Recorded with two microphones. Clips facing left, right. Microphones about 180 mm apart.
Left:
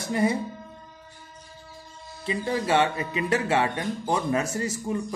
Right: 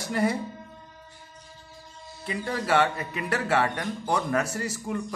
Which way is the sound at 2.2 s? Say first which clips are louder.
Left 3 dB; 20° left (ahead or behind).